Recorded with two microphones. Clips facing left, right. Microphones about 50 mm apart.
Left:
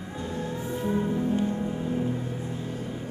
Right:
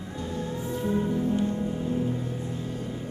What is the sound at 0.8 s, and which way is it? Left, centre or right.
Music, centre.